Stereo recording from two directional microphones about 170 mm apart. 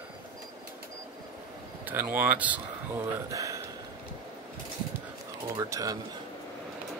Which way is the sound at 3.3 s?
20° right (ahead or behind).